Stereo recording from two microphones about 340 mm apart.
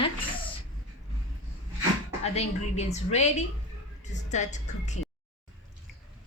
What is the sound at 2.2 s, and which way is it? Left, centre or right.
A woman's voice, centre.